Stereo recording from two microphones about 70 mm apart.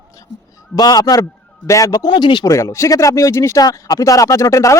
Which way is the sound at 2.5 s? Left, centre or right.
Left.